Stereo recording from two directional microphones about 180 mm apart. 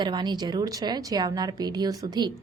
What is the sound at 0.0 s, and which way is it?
A woman's voice, 25° right (ahead or behind).